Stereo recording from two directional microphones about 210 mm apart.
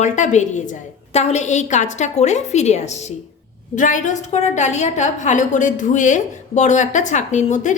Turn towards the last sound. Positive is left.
turn(degrees=35)  # may be behind; listen again after turning